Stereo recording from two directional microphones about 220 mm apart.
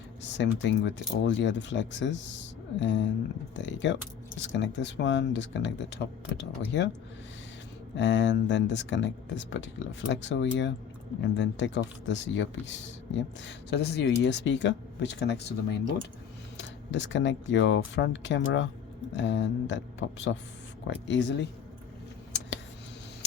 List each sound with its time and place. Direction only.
0.2 s speech: 55° left (ahead or behind)
7.9 s speech: 55° left (ahead or behind)